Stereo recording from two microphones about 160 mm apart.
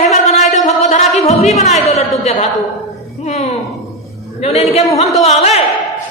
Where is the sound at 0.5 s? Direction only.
45° left (ahead or behind).